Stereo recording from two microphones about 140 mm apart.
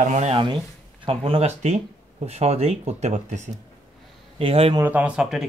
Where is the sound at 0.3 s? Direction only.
40° right (ahead or behind).